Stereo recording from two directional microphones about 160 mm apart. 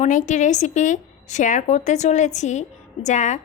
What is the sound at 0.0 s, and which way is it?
A woman's voice, 50° left (ahead or behind).